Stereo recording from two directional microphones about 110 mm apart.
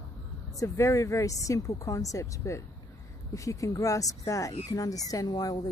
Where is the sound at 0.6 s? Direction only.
25° left (ahead or behind).